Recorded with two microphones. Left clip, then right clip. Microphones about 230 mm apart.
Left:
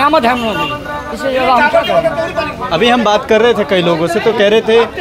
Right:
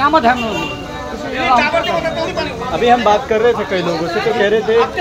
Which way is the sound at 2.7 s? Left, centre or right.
Left.